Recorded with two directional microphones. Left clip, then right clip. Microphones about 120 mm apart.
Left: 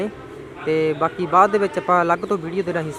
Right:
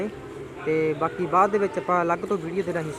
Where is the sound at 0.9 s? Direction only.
30° left (ahead or behind).